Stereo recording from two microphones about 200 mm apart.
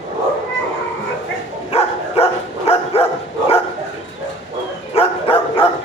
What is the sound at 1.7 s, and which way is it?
Dog, 30° left (ahead or behind).